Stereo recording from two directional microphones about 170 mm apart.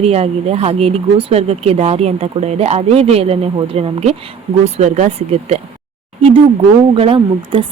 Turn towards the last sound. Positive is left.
turn(degrees=-30)  # may be behind; listen again after turning